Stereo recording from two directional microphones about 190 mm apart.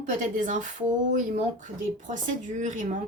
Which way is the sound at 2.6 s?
40° right (ahead or behind).